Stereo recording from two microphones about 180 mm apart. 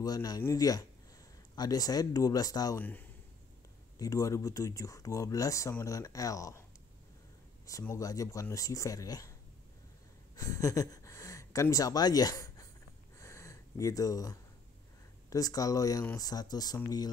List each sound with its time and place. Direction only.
0.0 s speech: 20° left (ahead or behind)
2.8 s speech: 10° left (ahead or behind)
7.8 s speech: 20° left (ahead or behind)
10.3 s speech: 20° left (ahead or behind)
13.2 s snort: 15° left (ahead or behind)
15.2 s speech: 20° left (ahead or behind)